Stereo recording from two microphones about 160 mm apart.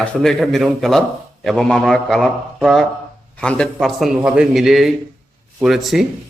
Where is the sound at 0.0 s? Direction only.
5° left (ahead or behind).